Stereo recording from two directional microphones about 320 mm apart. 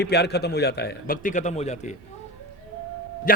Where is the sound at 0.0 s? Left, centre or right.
Left.